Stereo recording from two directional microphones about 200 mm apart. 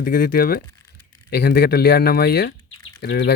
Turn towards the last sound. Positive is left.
turn(degrees=60)  # may be behind; listen again after turning